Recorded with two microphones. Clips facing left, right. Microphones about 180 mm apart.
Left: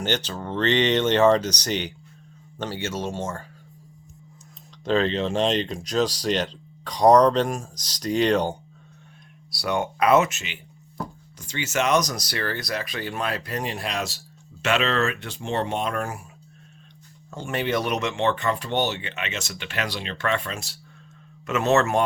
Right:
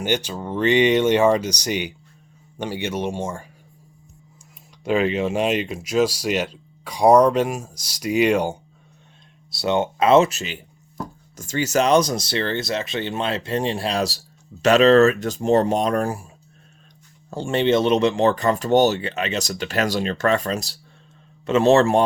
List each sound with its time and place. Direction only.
0.0 s speech: 10° right (ahead or behind)
4.9 s speech: 10° right (ahead or behind)
9.5 s speech: 25° right (ahead or behind)
17.3 s speech: 30° right (ahead or behind)